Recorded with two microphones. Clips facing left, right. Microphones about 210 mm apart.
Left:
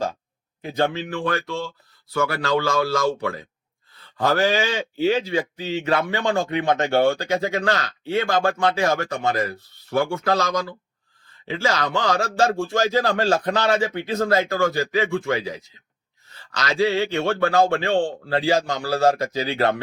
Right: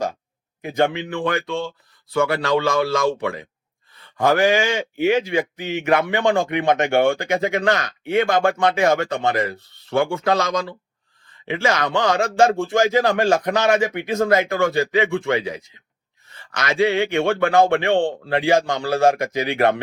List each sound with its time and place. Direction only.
0.8 s speech: 20° right (ahead or behind)